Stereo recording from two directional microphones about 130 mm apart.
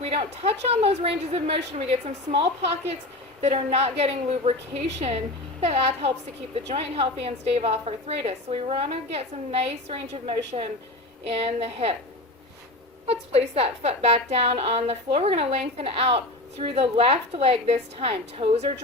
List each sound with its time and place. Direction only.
0.0 s a woman's voice: 50° right (ahead or behind)
13.1 s a woman's voice: 50° right (ahead or behind)